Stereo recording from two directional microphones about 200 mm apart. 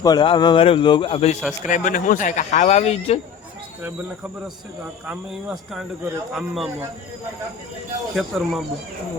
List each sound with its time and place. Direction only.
0.0 s a man's voice: 20° left (ahead or behind)
5.0 s speech: centre (ahead or behind)
8.1 s speech: centre (ahead or behind)